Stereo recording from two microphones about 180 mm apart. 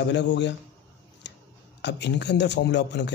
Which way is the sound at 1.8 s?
70° left (ahead or behind).